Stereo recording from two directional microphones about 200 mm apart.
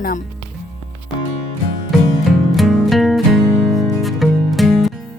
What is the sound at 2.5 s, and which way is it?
Music, centre (ahead or behind).